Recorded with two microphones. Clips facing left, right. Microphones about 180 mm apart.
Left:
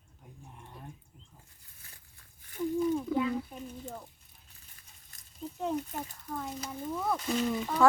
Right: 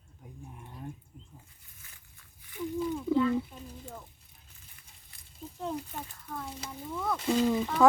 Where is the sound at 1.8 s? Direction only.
35° left (ahead or behind).